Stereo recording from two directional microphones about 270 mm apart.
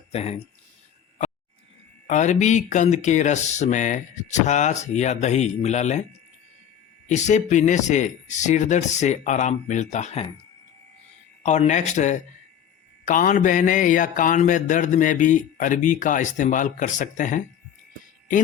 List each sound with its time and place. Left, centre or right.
0.1 s speech: left
2.0 s speech: left
7.1 s speech: left
11.4 s speech: left